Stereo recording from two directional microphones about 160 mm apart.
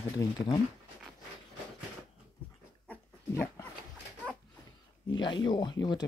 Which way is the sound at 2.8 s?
10° left (ahead or behind).